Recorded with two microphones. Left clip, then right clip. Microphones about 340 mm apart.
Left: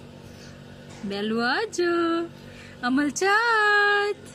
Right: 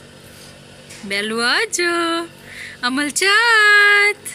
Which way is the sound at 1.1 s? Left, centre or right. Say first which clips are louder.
Right 7 dB; centre.